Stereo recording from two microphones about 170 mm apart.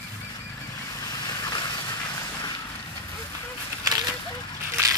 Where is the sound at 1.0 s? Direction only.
25° left (ahead or behind).